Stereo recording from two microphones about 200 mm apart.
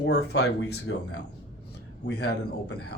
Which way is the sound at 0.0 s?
60° left (ahead or behind).